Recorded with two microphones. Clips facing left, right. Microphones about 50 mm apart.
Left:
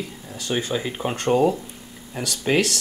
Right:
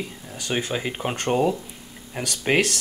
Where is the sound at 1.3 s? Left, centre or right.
Centre.